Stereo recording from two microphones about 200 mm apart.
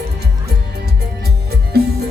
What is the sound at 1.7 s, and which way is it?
Music, 55° right (ahead or behind).